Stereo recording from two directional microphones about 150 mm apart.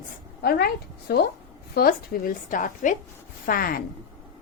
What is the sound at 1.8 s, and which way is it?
A woman's voice, 80° left.